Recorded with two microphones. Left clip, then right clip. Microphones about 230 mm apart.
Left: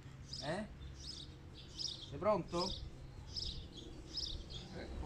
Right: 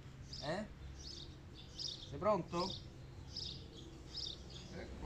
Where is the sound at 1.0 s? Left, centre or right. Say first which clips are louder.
Left 1 dB; left.